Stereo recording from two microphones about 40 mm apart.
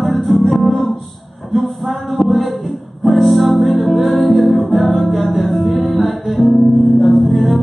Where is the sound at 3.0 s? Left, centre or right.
Centre.